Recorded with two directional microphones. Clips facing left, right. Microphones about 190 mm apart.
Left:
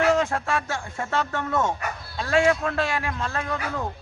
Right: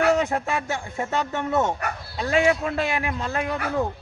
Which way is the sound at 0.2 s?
20° right (ahead or behind).